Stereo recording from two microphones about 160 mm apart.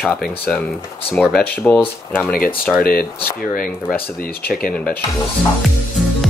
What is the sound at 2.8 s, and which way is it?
Speech, 70° left (ahead or behind).